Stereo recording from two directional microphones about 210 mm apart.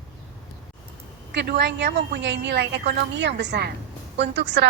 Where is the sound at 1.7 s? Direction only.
55° right (ahead or behind).